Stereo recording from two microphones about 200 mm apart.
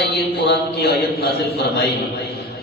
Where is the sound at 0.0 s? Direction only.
55° left (ahead or behind).